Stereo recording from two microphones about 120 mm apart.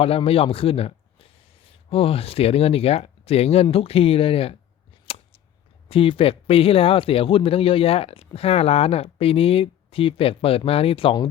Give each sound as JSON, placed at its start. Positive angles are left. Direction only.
{"t": 0.0, "sound": "speech", "side_deg": 50}
{"t": 5.9, "sound": "speech", "side_deg": 50}